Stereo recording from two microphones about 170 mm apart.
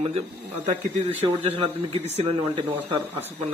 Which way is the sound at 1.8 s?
35° right (ahead or behind).